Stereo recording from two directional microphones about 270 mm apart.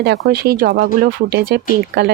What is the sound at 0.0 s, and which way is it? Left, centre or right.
Speech, right.